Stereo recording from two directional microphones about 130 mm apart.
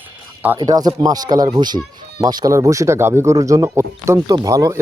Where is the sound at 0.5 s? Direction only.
30° right (ahead or behind).